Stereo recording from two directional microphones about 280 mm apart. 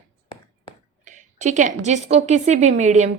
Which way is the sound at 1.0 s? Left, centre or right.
Right.